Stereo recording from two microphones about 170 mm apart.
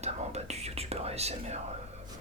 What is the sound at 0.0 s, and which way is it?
Whispering, 40° right (ahead or behind).